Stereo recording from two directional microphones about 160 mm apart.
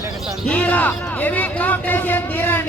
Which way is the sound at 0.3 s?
5° left (ahead or behind).